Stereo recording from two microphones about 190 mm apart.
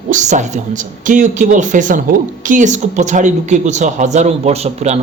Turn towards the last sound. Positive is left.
turn(degrees=-35)  # may be behind; listen again after turning